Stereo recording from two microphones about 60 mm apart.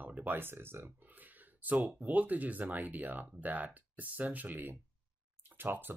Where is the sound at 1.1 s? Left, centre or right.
Right.